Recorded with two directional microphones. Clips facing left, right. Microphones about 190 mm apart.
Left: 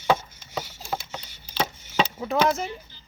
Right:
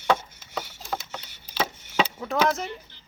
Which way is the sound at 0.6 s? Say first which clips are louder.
Left 1 dB; 10° left (ahead or behind).